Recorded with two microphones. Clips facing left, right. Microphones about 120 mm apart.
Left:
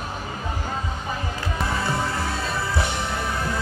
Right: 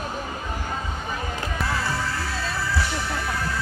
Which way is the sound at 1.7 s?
20° left (ahead or behind).